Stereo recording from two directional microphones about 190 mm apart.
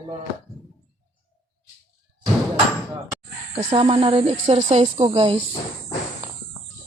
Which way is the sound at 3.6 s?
30° right (ahead or behind).